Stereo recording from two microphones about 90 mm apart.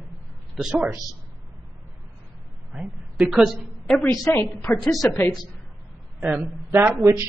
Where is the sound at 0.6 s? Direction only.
5° right (ahead or behind).